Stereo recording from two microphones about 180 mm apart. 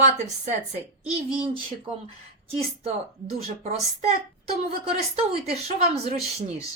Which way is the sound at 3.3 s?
35° right (ahead or behind).